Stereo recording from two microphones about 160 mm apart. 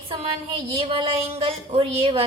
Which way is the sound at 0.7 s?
35° right (ahead or behind).